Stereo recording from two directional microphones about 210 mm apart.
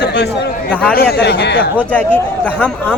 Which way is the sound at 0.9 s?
50° left (ahead or behind).